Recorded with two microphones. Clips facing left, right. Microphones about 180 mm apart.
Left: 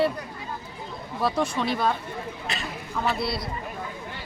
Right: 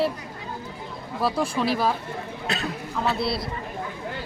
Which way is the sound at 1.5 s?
5° right (ahead or behind).